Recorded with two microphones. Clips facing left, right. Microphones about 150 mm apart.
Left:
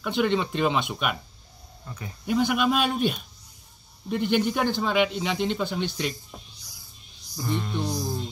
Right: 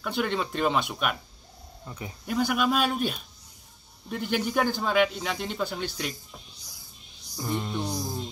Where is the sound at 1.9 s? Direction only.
15° right (ahead or behind).